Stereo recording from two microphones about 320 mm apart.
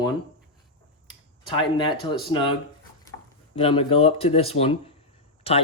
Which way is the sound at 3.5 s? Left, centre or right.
Centre.